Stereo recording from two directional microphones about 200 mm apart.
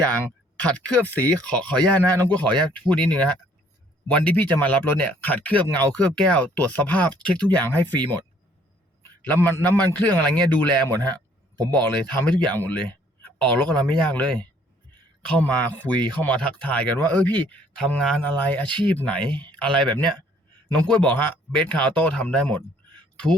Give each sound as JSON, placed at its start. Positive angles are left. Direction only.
{"t": 0.6, "sound": "speech", "side_deg": 5}
{"t": 9.2, "sound": "speech", "side_deg": 10}
{"t": 11.5, "sound": "speech", "side_deg": -20}
{"t": 11.8, "sound": "speech", "side_deg": 10}